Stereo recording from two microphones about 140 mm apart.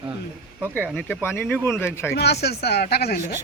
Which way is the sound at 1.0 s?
15° left (ahead or behind).